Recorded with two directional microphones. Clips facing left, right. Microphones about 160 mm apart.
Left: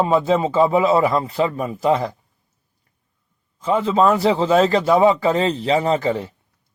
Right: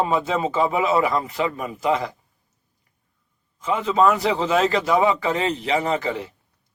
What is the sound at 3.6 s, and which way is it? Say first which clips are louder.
A man's voice: left 2 dB; 35° left (ahead or behind).